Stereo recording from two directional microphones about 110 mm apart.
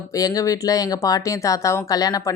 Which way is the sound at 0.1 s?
35° left (ahead or behind).